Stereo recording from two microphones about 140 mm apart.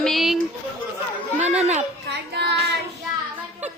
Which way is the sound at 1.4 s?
50° right (ahead or behind).